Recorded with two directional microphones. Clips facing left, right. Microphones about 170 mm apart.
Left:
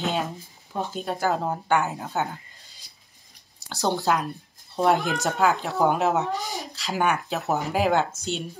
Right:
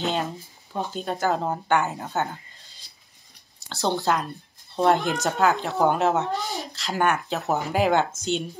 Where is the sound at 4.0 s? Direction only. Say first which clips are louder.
Even; centre (ahead or behind).